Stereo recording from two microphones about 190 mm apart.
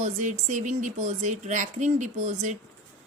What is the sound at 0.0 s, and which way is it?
A woman's voice, 40° right (ahead or behind).